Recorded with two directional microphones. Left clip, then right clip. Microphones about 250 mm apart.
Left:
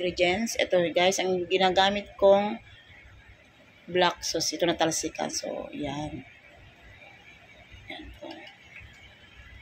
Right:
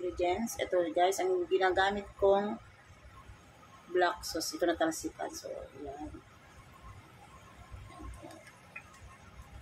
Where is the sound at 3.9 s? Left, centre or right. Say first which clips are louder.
Left 6 dB; centre.